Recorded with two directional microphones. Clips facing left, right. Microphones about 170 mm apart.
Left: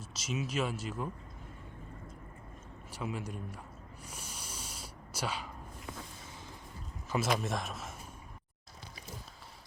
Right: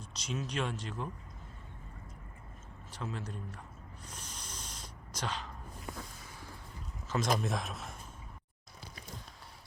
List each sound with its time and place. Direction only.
0.0 s speech: 5° left (ahead or behind)
2.9 s speech: 10° left (ahead or behind)
4.0 s a sound: 10° left (ahead or behind)
7.1 s speech: 5° left (ahead or behind)